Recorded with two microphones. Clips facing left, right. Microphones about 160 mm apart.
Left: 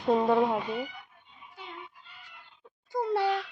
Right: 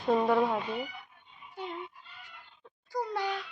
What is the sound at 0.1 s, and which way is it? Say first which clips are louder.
Speech: left 2 dB; 20° left (ahead or behind).